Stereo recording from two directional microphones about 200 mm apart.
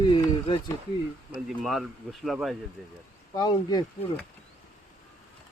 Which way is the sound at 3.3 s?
20° left (ahead or behind).